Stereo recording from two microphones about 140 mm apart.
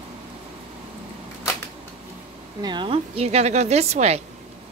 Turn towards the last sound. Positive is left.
turn(degrees=-50)  # may be behind; listen again after turning